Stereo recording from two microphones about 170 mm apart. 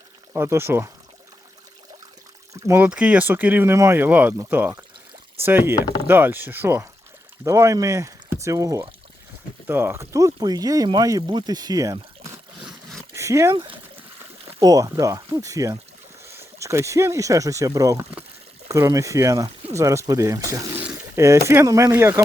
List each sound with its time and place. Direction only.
0.3 s speech: 15° right (ahead or behind)
2.5 s speech: 15° right (ahead or behind)
5.7 s speech: 20° left (ahead or behind)
6.1 s speech: 10° right (ahead or behind)
12.6 s a sound: centre (ahead or behind)
13.1 s dog: 15° right (ahead or behind)
13.5 s speech: 30° right (ahead or behind)